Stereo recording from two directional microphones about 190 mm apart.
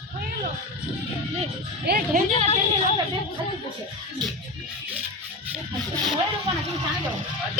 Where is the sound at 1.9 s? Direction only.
50° right (ahead or behind).